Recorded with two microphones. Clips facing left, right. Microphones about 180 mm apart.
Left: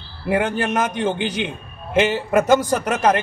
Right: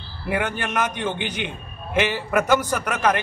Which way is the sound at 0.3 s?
30° left (ahead or behind).